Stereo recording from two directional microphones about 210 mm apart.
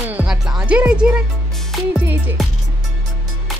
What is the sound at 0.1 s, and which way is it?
Music, 5° right (ahead or behind).